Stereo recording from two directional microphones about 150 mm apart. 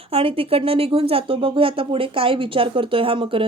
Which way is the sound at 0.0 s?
40° right (ahead or behind).